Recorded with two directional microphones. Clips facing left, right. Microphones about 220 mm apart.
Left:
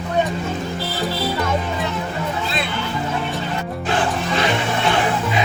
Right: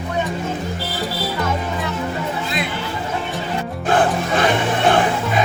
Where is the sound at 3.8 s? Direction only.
50° right (ahead or behind).